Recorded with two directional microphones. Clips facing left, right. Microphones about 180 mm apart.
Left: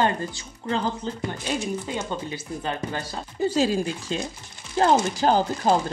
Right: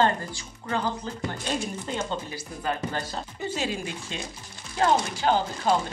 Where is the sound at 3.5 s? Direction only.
35° left (ahead or behind).